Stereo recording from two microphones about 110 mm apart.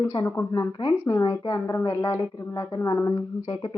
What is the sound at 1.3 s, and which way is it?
A woman's voice, 25° left (ahead or behind).